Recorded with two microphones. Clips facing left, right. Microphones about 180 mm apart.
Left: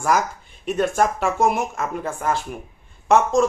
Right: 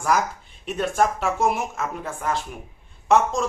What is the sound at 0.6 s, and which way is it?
Speech, centre (ahead or behind).